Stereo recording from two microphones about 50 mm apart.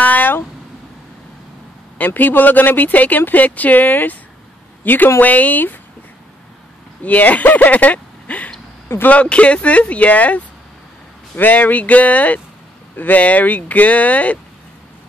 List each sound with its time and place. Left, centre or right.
0.0 s a sound: left
2.0 s speech: left
7.0 s speech: left
8.8 s speech: left
9.1 s speech: left